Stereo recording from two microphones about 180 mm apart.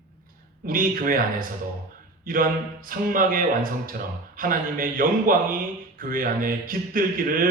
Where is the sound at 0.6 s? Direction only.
50° right (ahead or behind).